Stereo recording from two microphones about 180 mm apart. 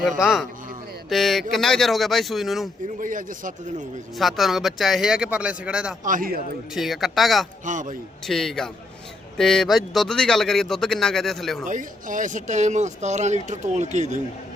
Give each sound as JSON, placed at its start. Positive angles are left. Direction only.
{"t": 1.1, "sound": "speech", "side_deg": 0}
{"t": 3.0, "sound": "speech", "side_deg": -50}
{"t": 4.2, "sound": "speech", "side_deg": 0}
{"t": 6.1, "sound": "speech", "side_deg": -50}
{"t": 6.7, "sound": "speech", "side_deg": 0}
{"t": 7.6, "sound": "speech", "side_deg": -45}
{"t": 8.3, "sound": "speech", "side_deg": 0}
{"t": 11.6, "sound": "speech", "side_deg": -45}